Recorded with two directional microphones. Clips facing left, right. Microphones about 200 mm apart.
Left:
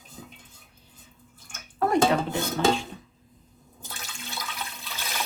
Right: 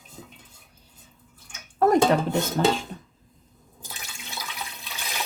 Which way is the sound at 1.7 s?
45° right (ahead or behind).